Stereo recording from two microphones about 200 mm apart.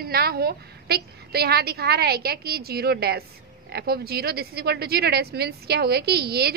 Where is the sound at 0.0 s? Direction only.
50° right (ahead or behind).